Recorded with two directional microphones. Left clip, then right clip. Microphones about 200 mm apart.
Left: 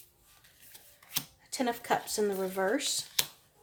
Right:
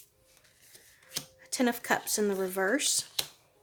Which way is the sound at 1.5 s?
35° right (ahead or behind).